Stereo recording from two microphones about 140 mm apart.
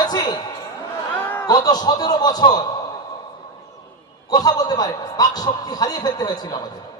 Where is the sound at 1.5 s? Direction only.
30° left (ahead or behind).